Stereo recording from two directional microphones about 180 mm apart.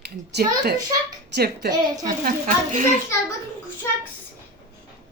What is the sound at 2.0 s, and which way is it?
Speech, 50° right (ahead or behind).